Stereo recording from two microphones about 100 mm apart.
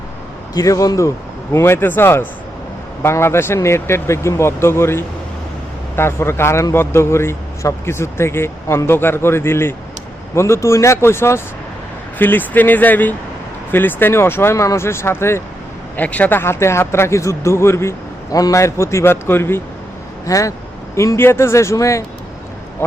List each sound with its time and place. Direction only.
0.5 s a man's voice: 35° left (ahead or behind)
16.0 s a man's voice: 15° left (ahead or behind)